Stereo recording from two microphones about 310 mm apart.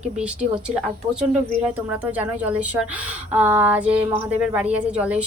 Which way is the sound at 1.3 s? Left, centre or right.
Centre.